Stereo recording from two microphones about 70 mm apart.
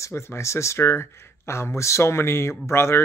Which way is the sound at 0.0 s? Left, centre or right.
Left.